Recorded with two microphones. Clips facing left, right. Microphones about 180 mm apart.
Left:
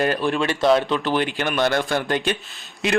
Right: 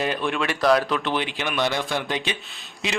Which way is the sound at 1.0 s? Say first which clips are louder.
Left 4 dB; centre (ahead or behind).